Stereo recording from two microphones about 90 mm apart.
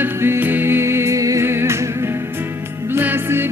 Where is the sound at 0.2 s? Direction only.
25° right (ahead or behind).